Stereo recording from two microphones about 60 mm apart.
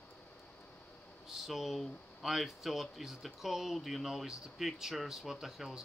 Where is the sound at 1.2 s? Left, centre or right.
Centre.